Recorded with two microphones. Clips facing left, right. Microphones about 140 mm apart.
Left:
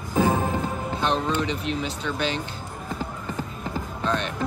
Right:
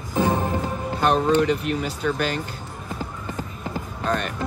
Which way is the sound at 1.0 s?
55° right (ahead or behind).